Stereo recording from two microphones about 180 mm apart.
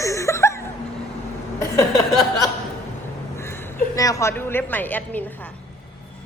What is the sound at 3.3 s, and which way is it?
A woman's voice, 15° left (ahead or behind).